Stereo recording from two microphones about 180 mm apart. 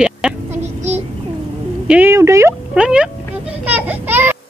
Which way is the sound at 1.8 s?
10° right (ahead or behind).